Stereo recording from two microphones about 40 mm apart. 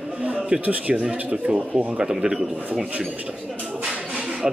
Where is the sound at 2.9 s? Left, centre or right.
Right.